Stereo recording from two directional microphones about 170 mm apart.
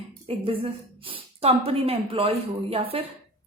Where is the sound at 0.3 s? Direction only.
35° right (ahead or behind).